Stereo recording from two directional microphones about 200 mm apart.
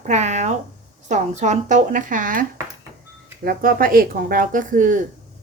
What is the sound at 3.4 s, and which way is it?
Speech, 45° right (ahead or behind).